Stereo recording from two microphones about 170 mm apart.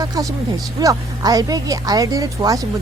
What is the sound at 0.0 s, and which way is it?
Speech, 20° right (ahead or behind).